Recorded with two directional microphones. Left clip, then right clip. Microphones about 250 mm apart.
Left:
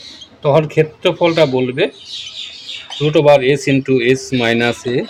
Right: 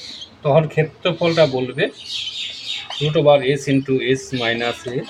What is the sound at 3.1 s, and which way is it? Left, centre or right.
Speech, left.